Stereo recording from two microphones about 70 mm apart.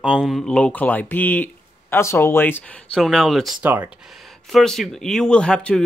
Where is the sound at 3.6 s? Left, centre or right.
Right.